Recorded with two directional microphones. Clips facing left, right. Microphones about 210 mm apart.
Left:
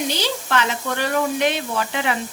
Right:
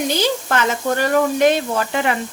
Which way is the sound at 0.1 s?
45° right (ahead or behind).